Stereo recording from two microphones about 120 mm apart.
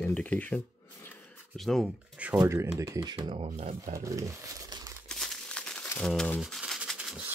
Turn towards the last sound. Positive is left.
turn(degrees=-5)  # may be behind; listen again after turning